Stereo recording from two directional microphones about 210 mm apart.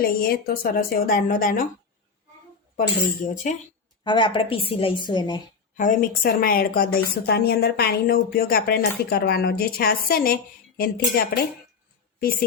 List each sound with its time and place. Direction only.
0.0 s speech: 45° left (ahead or behind)
2.7 s speech: 40° left (ahead or behind)
4.0 s a woman's voice: 20° left (ahead or behind)
5.7 s speech: 40° left (ahead or behind)
12.2 s speech: 45° left (ahead or behind)